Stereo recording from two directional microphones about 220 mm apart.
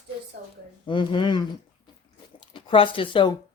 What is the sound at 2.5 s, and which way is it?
Speech, 20° left (ahead or behind).